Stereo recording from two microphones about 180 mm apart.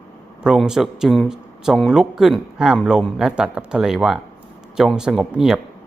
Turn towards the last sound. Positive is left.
turn(degrees=0)  # may be behind; listen again after turning